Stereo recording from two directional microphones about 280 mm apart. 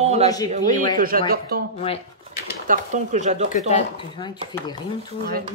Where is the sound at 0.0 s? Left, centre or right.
Right.